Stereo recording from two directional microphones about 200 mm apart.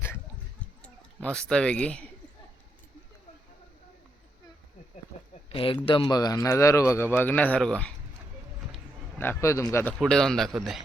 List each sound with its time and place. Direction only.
0.8 s speech: 5° left (ahead or behind)
5.5 s speech: 25° left (ahead or behind); by 7.9 s 5° left (ahead or behind)
9.1 s speech: 10° left (ahead or behind)
10.0 s speech: 5° left (ahead or behind)